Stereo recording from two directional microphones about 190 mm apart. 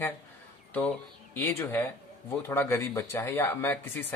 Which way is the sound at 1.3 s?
10° left (ahead or behind).